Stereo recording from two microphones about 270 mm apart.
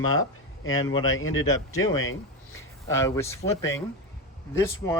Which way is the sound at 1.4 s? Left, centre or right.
Centre.